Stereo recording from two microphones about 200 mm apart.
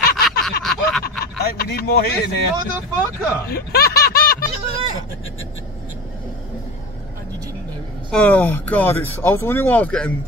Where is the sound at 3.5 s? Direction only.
50° left (ahead or behind).